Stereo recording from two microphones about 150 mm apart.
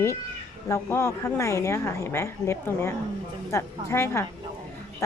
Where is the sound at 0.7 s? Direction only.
15° left (ahead or behind).